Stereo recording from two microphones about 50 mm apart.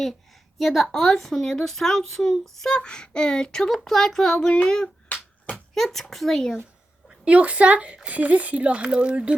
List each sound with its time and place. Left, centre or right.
0.6 s a child's voice: centre
5.7 s speech: centre
7.3 s speech: right